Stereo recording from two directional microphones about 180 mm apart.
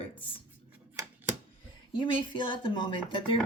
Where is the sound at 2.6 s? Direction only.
25° left (ahead or behind).